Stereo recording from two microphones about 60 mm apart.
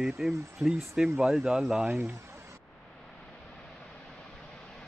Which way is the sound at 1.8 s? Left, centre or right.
Right.